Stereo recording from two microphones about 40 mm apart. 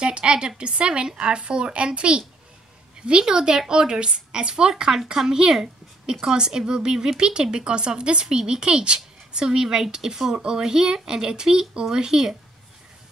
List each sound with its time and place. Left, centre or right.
0.0 s a woman's voice: right